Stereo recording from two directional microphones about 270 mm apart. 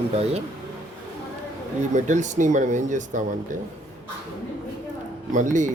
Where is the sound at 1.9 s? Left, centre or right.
Right.